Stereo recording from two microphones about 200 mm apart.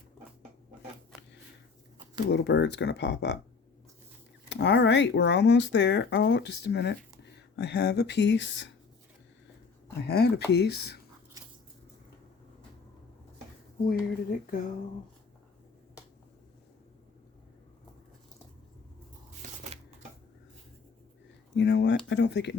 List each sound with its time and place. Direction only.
2.3 s speech: 60° left (ahead or behind)
4.4 s speech: 60° left (ahead or behind)
10.0 s speech: 55° left (ahead or behind)
11.4 s biting: 15° right (ahead or behind)
13.8 s speech: 45° left (ahead or behind)
19.7 s shuffling cards: 30° right (ahead or behind)
21.5 s speech: 60° left (ahead or behind)